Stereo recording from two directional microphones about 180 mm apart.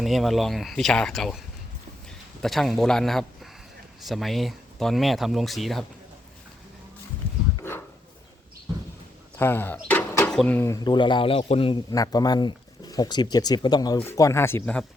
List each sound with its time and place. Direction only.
0.0 s speech: centre (ahead or behind)
9.4 s speech: 10° left (ahead or behind)